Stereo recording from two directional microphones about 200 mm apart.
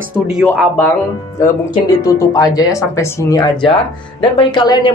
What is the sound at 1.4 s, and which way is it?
Speech, 15° left (ahead or behind).